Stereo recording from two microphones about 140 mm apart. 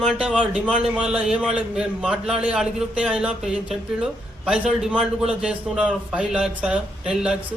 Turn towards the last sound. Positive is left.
turn(degrees=-5)  # may be behind; listen again after turning